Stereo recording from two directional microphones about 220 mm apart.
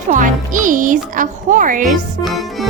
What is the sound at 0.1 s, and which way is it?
A child's voice, 35° right (ahead or behind).